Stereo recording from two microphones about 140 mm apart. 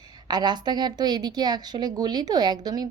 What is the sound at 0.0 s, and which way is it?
A woman's voice, 30° right (ahead or behind).